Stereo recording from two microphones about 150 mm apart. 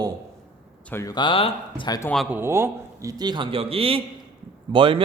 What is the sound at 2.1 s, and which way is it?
Speech, centre (ahead or behind).